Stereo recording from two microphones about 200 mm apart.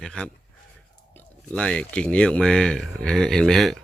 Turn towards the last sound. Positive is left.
turn(degrees=0)  # may be behind; listen again after turning